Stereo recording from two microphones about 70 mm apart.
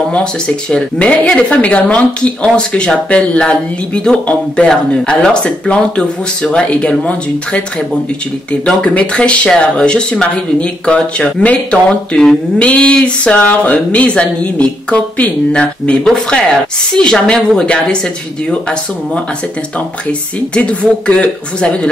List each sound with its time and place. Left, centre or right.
0.1 s speech: centre